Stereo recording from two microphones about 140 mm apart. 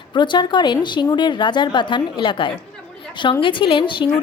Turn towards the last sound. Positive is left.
turn(degrees=35)  # may be behind; listen again after turning